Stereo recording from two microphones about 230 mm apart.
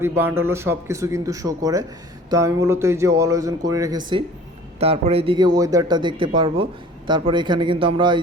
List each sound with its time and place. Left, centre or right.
0.0 s speech: centre